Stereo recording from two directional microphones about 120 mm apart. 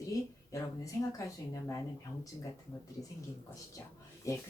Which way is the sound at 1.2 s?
25° left (ahead or behind).